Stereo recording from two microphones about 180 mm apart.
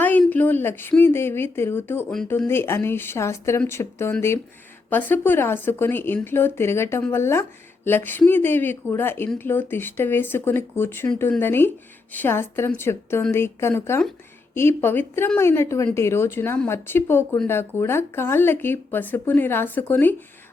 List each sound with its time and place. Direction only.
0.0 s speech: 10° left (ahead or behind)